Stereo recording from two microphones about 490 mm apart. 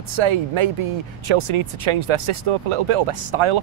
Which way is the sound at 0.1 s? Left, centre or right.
Right.